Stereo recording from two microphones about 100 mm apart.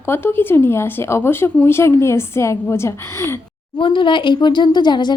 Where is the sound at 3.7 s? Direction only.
55° left (ahead or behind).